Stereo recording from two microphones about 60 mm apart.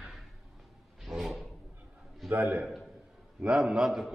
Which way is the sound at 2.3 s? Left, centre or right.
Right.